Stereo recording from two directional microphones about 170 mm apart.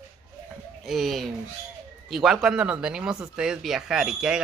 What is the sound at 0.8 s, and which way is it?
A man's voice, centre (ahead or behind).